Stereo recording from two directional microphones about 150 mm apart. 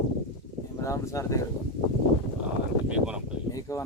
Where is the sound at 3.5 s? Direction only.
20° left (ahead or behind).